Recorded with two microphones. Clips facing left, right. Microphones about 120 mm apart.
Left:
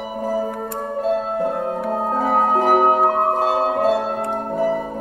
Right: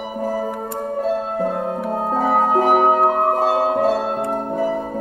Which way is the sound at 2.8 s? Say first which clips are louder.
Right 1 dB; 5° left (ahead or behind).